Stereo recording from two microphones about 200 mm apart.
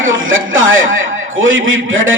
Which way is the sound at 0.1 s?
75° right (ahead or behind).